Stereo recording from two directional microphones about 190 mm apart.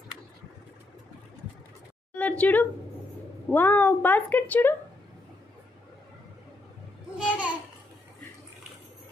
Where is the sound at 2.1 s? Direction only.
5° left (ahead or behind).